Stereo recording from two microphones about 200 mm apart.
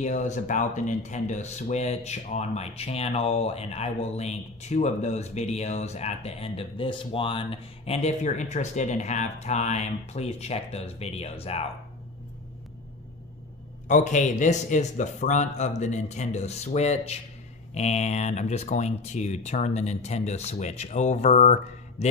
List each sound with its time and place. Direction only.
0.0 s speech: 35° left (ahead or behind)
13.8 s speech: 40° left (ahead or behind)